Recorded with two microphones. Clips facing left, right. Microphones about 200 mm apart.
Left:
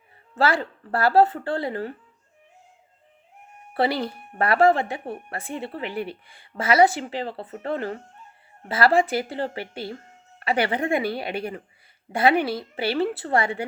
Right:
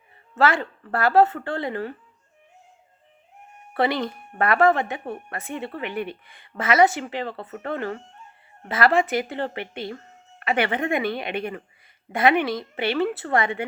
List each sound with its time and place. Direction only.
0.3 s speech: 35° left (ahead or behind)
3.8 s speech: 35° left (ahead or behind)